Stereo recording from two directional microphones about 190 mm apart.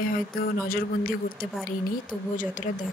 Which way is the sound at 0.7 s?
50° left (ahead or behind).